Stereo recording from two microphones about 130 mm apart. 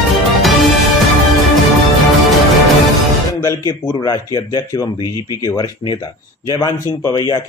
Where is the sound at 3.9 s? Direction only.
30° left (ahead or behind).